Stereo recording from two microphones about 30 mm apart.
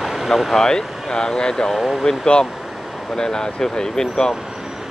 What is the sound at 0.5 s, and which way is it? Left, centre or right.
Speech, left.